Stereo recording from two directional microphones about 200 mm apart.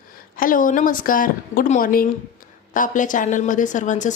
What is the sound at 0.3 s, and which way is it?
A woman's voice, 45° left (ahead or behind).